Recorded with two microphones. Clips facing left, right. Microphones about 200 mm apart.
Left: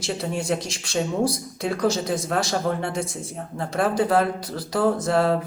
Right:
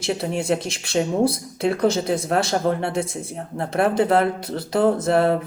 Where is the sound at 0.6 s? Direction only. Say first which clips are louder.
Right 3 dB; 60° right (ahead or behind).